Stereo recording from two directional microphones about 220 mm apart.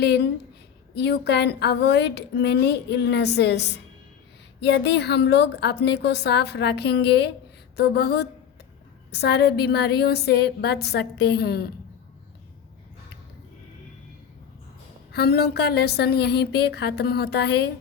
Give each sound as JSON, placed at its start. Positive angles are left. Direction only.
{"t": 0.0, "sound": "a woman's voice", "side_deg": 50}
{"t": 15.1, "sound": "a woman's voice", "side_deg": 45}